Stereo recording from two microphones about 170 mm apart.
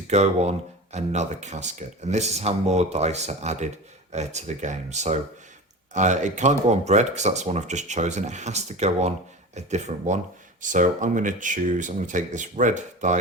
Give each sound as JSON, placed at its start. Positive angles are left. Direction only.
{"t": 0.1, "sound": "speech", "side_deg": -40}